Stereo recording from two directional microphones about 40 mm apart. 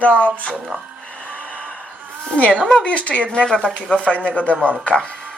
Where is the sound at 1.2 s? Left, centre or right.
Left.